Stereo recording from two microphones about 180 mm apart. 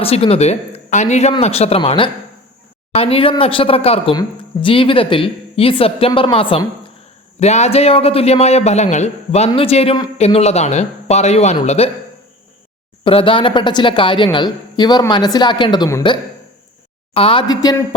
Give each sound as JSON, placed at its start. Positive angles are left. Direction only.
{"t": 0.0, "sound": "speech", "side_deg": 35}
{"t": 13.1, "sound": "speech", "side_deg": 30}